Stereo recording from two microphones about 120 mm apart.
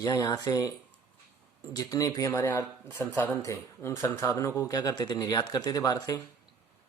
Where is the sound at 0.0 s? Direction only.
35° left (ahead or behind).